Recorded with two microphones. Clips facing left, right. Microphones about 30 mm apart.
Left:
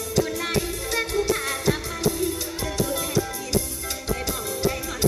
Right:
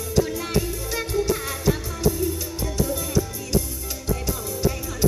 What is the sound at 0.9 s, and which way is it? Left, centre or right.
Music, centre.